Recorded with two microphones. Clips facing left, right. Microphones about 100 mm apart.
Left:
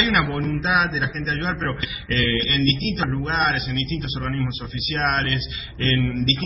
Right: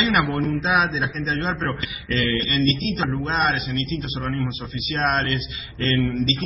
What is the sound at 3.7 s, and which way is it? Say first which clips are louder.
A man's voice: right 1 dB; 25° right (ahead or behind).